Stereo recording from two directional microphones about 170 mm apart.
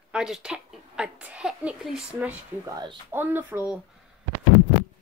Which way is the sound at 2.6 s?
20° right (ahead or behind).